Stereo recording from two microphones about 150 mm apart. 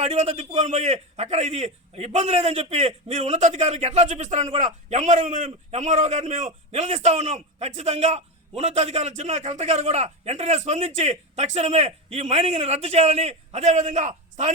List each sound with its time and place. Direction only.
0.0 s a man's voice: 45° right (ahead or behind)